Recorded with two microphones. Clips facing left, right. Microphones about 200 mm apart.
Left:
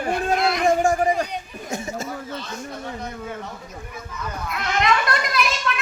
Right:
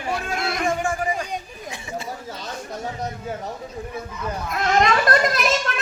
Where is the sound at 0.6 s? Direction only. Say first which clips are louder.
Left 5 dB; 40° left (ahead or behind).